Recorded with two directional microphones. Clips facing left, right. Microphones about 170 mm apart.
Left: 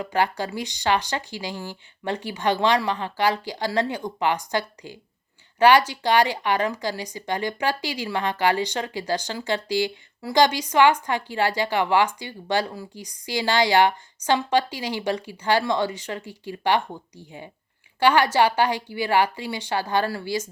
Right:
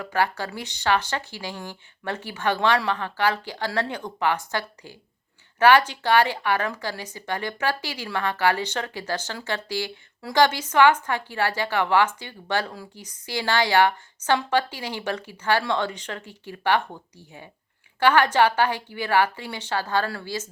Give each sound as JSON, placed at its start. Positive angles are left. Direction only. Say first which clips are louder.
{"t": 0.0, "sound": "speech", "louder": "left 1 dB", "side_deg": 15}